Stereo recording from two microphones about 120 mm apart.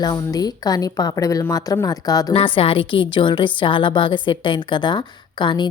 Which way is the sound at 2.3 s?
45° left (ahead or behind).